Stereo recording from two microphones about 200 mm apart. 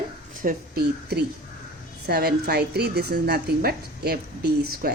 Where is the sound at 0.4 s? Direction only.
45° right (ahead or behind).